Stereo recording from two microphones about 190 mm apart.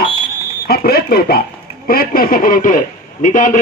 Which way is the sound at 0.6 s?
55° left (ahead or behind).